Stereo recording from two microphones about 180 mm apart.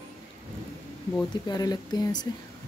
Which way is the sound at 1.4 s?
20° left (ahead or behind).